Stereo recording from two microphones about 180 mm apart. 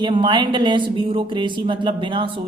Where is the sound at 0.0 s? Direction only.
25° right (ahead or behind).